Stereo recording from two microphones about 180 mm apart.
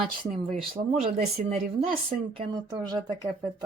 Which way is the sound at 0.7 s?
35° right (ahead or behind).